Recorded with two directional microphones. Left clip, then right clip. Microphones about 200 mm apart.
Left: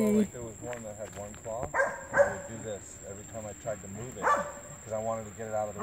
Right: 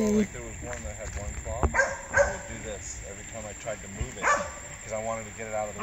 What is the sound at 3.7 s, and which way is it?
Speech, 5° right (ahead or behind).